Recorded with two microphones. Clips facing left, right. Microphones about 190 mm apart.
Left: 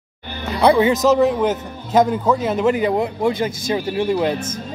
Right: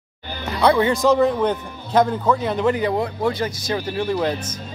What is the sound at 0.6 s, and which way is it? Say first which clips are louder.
A man's voice: left 3 dB; 10° left (ahead or behind).